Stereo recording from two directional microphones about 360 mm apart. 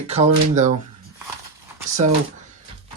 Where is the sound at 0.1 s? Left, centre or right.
Centre.